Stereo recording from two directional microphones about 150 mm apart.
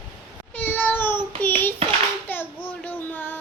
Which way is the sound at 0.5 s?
15° left (ahead or behind).